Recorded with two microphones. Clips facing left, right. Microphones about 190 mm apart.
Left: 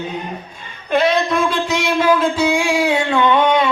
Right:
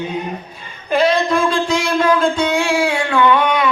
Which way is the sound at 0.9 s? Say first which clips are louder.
Right 1 dB; centre (ahead or behind).